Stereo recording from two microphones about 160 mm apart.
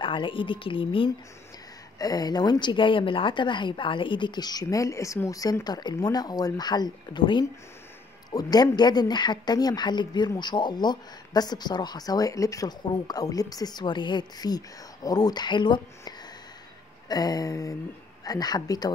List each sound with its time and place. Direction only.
0.0 s speech: 30° left (ahead or behind)